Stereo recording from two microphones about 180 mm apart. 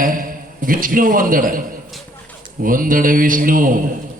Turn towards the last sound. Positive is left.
turn(degrees=-50)  # may be behind; listen again after turning